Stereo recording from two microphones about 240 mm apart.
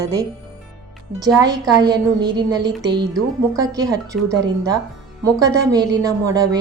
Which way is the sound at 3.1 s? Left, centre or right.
Centre.